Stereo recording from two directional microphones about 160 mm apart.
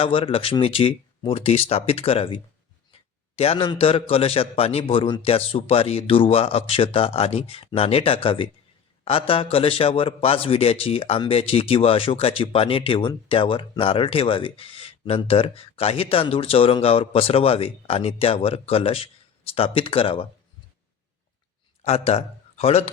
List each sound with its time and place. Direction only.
0.0 s a man's voice: 35° left (ahead or behind)
21.8 s speech: 40° left (ahead or behind)